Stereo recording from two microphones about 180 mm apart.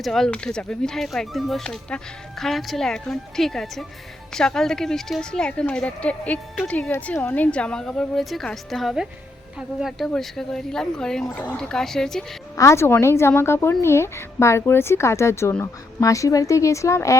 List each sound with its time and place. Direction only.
0.0 s a woman's voice: centre (ahead or behind)
12.5 s speech: 15° left (ahead or behind)